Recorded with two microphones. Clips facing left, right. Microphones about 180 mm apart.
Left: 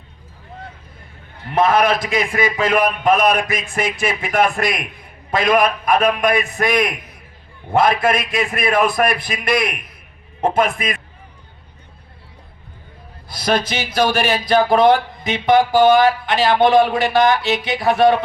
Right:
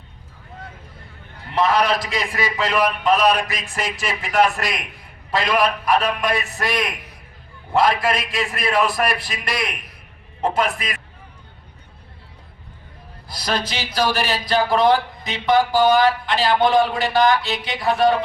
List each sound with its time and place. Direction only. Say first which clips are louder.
1.5 s speech: left 3 dB; 50° left (ahead or behind)
13.4 s speech: left 5 dB; 50° left (ahead or behind)